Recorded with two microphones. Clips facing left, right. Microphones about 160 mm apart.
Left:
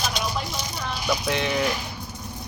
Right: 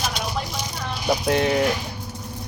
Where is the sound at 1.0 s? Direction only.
40° right (ahead or behind).